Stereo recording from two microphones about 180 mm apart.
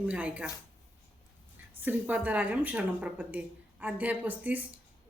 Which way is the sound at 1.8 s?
10° right (ahead or behind).